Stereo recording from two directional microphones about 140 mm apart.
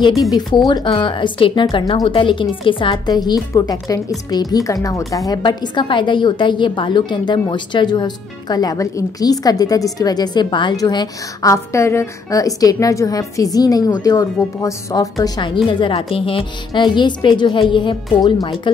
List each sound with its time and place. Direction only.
0.2 s a woman's voice: 25° left (ahead or behind)